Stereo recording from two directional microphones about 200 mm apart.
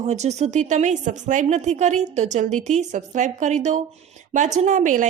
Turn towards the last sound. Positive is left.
turn(degrees=-40)  # may be behind; listen again after turning